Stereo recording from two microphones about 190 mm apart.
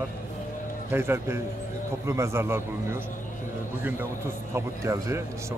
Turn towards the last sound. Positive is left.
turn(degrees=-15)  # may be behind; listen again after turning